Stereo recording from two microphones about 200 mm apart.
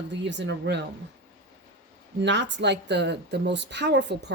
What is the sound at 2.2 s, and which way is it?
Speech, 60° right (ahead or behind).